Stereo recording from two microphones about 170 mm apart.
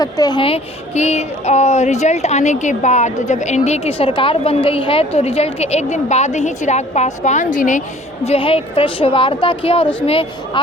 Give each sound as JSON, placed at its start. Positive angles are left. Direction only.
{"t": 0.0, "sound": "speech", "side_deg": 25}